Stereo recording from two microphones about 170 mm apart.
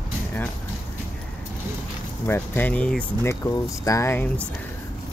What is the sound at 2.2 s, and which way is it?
Speech, 15° left (ahead or behind).